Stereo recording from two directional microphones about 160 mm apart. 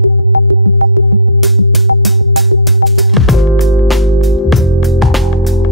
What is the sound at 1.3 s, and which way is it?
Music, centre (ahead or behind).